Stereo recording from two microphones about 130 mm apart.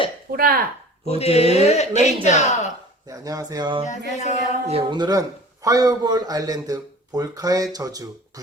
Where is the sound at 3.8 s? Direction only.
65° left (ahead or behind).